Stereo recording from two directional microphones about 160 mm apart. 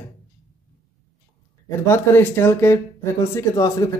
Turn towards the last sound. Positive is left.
turn(degrees=20)  # may be behind; listen again after turning